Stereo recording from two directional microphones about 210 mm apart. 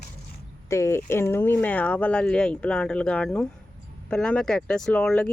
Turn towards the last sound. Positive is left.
turn(degrees=5)  # may be behind; listen again after turning